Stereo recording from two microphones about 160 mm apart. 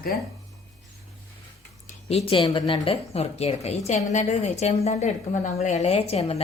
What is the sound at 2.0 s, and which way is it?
A woman's voice, 40° left (ahead or behind).